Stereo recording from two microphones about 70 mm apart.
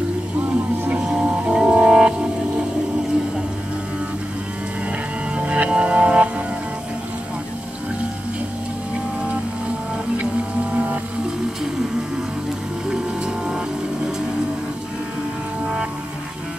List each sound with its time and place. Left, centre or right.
1.1 s music: centre
5.4 s music: centre
15.6 s music: centre